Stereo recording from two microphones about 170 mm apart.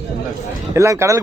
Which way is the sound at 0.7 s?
15° right (ahead or behind).